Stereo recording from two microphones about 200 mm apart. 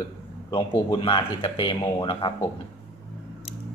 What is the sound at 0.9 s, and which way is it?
Speech, 25° left (ahead or behind).